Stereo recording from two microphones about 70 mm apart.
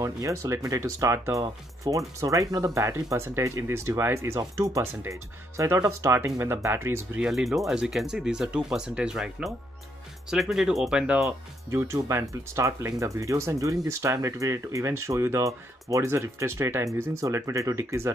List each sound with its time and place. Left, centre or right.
0.0 s speech: right
4.4 s speech: right
7.2 s speech: centre
11.2 s speech: right